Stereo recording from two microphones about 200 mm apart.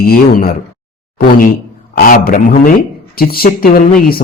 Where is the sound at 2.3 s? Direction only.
40° left (ahead or behind).